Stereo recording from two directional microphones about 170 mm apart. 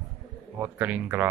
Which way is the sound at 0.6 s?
10° right (ahead or behind).